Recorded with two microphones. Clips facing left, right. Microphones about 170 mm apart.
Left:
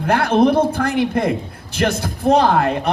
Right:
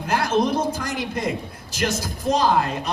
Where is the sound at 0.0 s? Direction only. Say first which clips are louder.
Left 6 dB; 60° left (ahead or behind).